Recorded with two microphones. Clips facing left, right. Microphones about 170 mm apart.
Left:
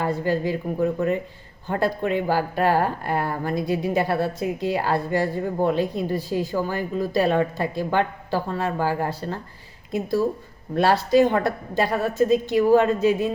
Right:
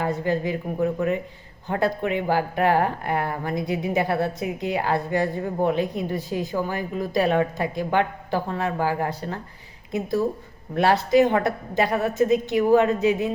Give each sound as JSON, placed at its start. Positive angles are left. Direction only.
{"t": 0.0, "sound": "a woman's voice", "side_deg": -20}